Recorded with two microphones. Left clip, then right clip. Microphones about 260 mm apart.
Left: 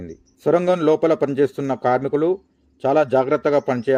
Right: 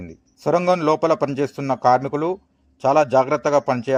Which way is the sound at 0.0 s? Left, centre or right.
Centre.